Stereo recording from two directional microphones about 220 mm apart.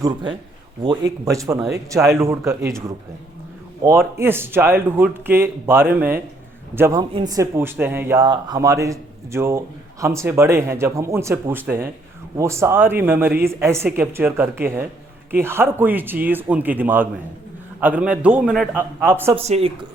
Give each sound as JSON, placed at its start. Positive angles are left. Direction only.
{"t": 0.8, "sound": "speech", "side_deg": -15}
{"t": 3.8, "sound": "speech", "side_deg": -10}
{"t": 19.5, "sound": "speech", "side_deg": -25}